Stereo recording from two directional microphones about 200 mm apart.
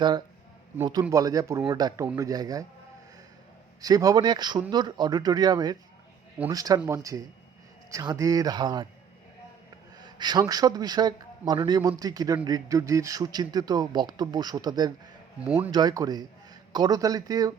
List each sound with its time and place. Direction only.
0.8 s speech: 20° right (ahead or behind)
3.8 s speech: 20° right (ahead or behind)
10.0 s speech: 20° right (ahead or behind)
15.4 s speech: 5° right (ahead or behind)
15.7 s speech: 20° right (ahead or behind)